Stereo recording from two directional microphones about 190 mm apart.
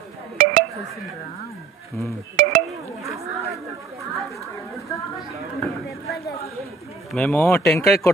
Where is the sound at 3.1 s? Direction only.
15° right (ahead or behind).